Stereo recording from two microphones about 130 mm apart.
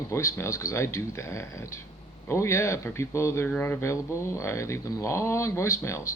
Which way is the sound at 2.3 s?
20° left (ahead or behind).